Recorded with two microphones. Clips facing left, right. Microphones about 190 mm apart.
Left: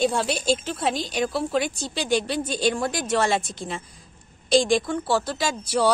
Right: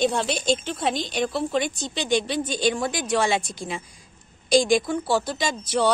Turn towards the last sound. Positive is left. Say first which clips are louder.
# even
turn(degrees=5)  # may be behind; listen again after turning